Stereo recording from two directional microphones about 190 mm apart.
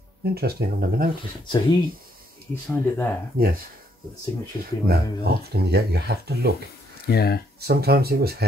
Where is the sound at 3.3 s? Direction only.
50° right (ahead or behind).